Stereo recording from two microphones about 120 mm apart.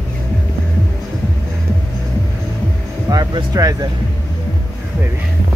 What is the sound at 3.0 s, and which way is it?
Speech, 30° right (ahead or behind).